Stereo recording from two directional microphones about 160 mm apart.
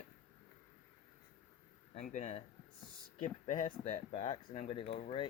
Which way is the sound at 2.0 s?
50° left (ahead or behind).